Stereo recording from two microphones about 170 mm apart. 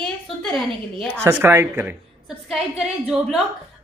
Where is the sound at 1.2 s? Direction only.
15° right (ahead or behind).